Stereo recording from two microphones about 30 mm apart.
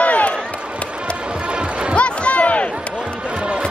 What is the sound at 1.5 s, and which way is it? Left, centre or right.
Music, right.